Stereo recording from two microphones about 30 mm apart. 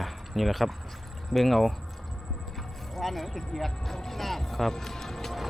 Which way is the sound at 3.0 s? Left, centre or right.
Centre.